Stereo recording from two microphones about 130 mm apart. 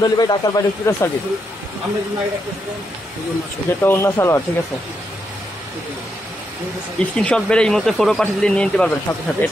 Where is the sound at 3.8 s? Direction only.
20° left (ahead or behind).